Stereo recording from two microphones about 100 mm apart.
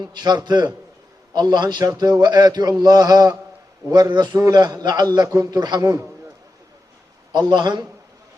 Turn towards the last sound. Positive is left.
turn(degrees=-45)  # may be behind; listen again after turning